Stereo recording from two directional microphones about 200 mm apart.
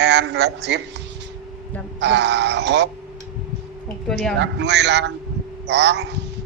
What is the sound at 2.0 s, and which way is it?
Speech, 60° right (ahead or behind).